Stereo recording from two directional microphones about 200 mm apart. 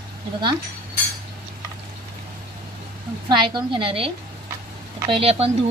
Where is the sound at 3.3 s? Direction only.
25° right (ahead or behind).